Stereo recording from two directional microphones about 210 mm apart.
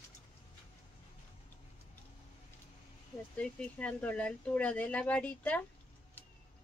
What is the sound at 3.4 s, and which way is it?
Speech, 5° left (ahead or behind).